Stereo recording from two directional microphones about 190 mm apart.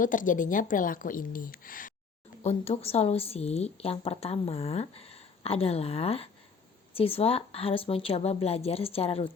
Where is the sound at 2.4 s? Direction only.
35° left (ahead or behind).